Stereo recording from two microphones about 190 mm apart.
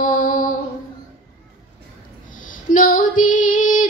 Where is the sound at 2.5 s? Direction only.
45° left (ahead or behind).